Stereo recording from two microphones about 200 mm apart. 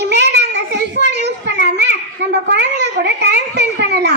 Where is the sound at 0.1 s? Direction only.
60° right (ahead or behind).